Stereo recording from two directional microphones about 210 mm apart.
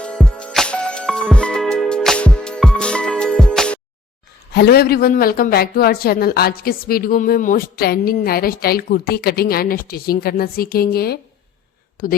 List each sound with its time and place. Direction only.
0.0 s music: 5° left (ahead or behind)
4.5 s speech: 50° left (ahead or behind)